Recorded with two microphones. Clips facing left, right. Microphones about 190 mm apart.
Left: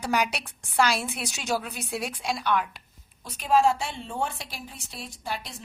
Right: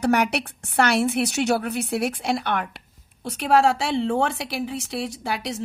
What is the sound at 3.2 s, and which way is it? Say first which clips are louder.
A woman's voice: right 3 dB; 75° right (ahead or behind).